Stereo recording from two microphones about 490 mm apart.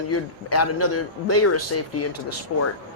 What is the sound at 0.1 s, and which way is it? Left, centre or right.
A man's voice, left.